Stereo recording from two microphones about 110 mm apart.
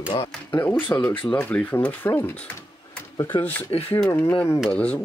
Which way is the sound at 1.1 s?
50° left (ahead or behind).